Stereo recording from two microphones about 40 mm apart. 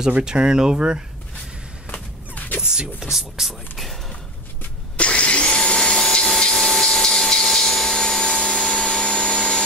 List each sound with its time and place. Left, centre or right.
0.2 s speech: centre
1.9 s a sound: left
2.6 s speech: right
3.0 s speech: centre
4.9 s vacuum cleaner: left
5.8 s vacuum cleaner: centre
8.8 s vacuum cleaner: left